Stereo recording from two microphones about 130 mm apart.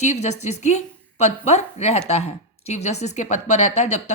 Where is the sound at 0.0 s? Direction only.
60° left (ahead or behind).